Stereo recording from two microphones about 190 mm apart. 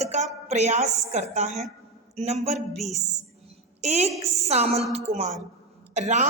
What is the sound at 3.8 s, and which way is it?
A woman's voice, 35° right (ahead or behind).